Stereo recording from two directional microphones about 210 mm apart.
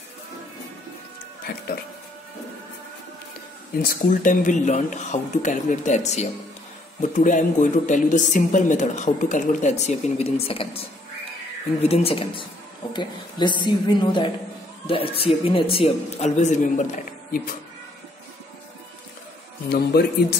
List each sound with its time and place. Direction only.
1.5 s speech: 50° left (ahead or behind)
3.8 s speech: 40° left (ahead or behind)
11.9 s a woman's voice: 25° left (ahead or behind)
19.7 s speech: 50° left (ahead or behind)